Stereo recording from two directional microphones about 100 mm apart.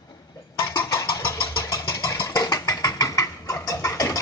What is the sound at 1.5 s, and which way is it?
Vehicle, 30° left (ahead or behind).